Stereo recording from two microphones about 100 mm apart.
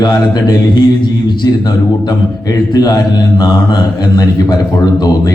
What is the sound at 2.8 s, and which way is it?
A man's voice, 45° left (ahead or behind).